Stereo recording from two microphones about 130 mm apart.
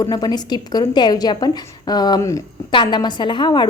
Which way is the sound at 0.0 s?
30° left (ahead or behind).